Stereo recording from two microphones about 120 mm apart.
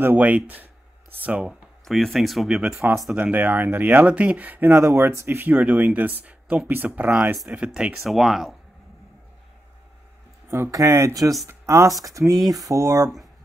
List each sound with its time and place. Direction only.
0.0 s speech: 15° right (ahead or behind)
1.9 s speech: centre (ahead or behind)
10.5 s speech: 25° right (ahead or behind)